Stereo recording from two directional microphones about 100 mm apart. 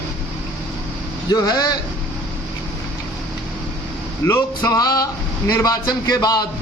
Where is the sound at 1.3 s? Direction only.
40° left (ahead or behind).